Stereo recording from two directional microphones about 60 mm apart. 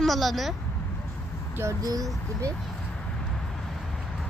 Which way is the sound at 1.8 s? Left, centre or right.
Right.